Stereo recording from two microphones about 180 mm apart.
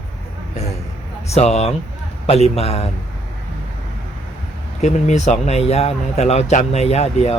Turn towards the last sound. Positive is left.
turn(degrees=35)  # may be behind; listen again after turning